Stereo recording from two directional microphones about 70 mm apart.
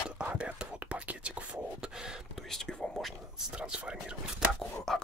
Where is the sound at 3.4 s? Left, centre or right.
Centre.